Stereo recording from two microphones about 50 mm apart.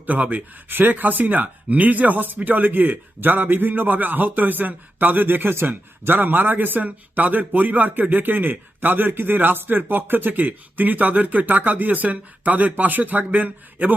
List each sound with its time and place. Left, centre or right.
0.0 s speech: right